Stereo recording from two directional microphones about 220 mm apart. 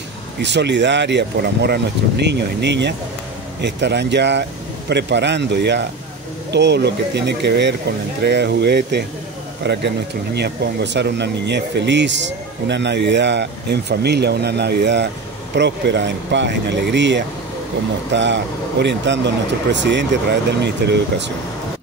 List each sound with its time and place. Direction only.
0.4 s speech: 50° right (ahead or behind)